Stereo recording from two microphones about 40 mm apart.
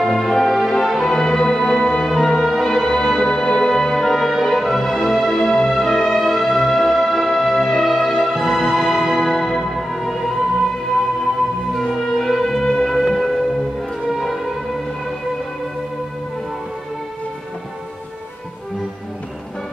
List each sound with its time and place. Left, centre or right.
0.0 s music: centre
11.7 s music: centre